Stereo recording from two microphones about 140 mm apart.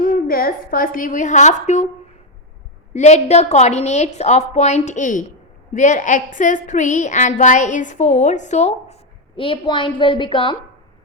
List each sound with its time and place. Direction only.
0.0 s a woman's voice: 90° left; by 1.9 s 55° left (ahead or behind)
2.9 s a woman's voice: 55° left (ahead or behind); by 10.6 s 35° left (ahead or behind)